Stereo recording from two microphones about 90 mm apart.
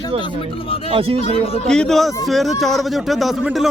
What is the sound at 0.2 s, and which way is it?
Speech, 65° left (ahead or behind).